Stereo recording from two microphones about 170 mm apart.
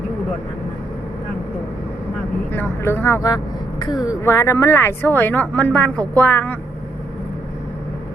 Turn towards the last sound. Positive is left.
turn(degrees=10)  # may be behind; listen again after turning